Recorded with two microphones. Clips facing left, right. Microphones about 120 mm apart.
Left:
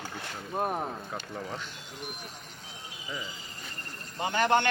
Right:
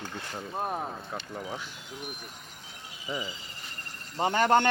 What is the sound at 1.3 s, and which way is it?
Speech, 10° right (ahead or behind).